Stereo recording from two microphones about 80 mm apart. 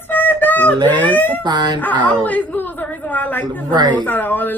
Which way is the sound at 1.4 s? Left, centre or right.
Right.